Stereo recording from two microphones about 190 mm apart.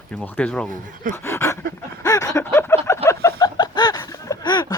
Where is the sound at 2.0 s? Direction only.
15° left (ahead or behind).